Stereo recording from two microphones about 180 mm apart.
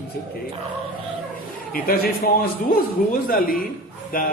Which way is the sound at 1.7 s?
55° left (ahead or behind).